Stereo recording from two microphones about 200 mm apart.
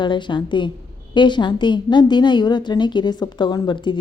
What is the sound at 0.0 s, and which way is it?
A woman's voice, 25° left (ahead or behind).